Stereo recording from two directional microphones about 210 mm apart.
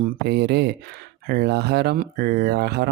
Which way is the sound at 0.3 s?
50° right (ahead or behind).